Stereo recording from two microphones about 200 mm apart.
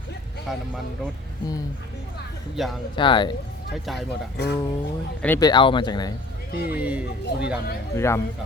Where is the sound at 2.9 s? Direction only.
25° left (ahead or behind).